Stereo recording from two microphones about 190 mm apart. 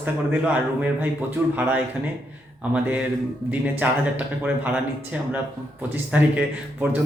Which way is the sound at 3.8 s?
10° right (ahead or behind).